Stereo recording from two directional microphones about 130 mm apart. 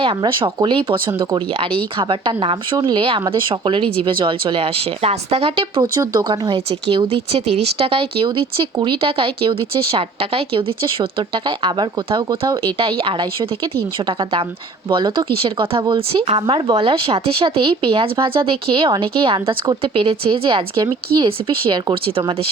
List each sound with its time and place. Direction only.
0.0 s speech: 40° right (ahead or behind)
5.8 s speech: 30° right (ahead or behind)
14.8 s speech: 40° right (ahead or behind)